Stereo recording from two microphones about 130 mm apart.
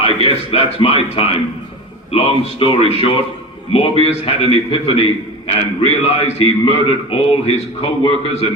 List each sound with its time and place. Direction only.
0.0 s a man's voice: 50° left (ahead or behind)